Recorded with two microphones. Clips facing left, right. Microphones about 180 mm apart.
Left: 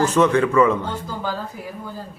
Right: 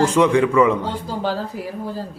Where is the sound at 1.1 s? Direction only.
30° right (ahead or behind).